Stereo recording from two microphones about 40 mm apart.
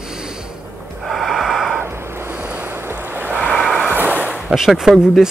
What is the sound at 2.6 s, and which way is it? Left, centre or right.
Boat, right.